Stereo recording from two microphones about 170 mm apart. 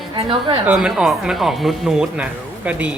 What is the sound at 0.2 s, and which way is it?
Speech, 30° right (ahead or behind).